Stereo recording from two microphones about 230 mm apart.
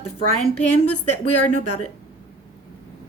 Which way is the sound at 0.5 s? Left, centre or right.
Left.